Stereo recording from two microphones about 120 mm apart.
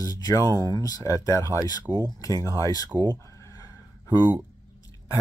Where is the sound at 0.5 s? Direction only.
40° right (ahead or behind).